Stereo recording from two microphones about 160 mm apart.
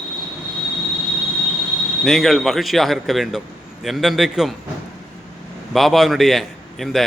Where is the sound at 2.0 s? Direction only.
Centre (ahead or behind).